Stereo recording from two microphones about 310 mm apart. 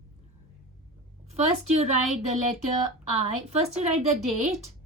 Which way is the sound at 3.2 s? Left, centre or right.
Centre.